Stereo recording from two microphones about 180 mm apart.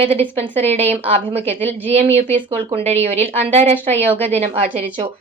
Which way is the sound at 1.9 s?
35° right (ahead or behind).